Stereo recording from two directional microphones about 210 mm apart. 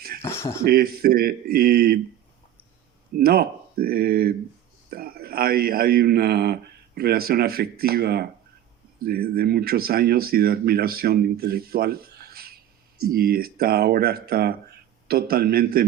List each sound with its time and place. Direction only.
0.3 s a sound: 10° left (ahead or behind)
0.6 s speech: 45° right (ahead or behind)
3.2 s speech: 45° right (ahead or behind)